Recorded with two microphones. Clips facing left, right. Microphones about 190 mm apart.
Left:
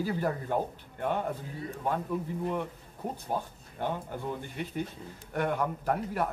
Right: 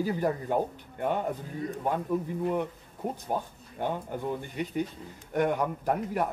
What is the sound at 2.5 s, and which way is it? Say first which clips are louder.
Speech: right 4 dB; 15° right (ahead or behind).